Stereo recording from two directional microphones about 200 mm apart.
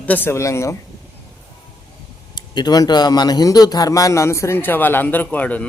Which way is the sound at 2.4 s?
20° left (ahead or behind).